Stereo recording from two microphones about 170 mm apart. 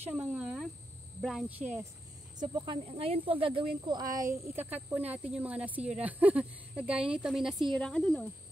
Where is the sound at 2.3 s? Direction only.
25° right (ahead or behind); by 8.3 s 5° left (ahead or behind).